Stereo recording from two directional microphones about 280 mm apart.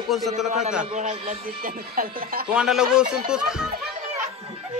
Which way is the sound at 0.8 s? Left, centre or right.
Right.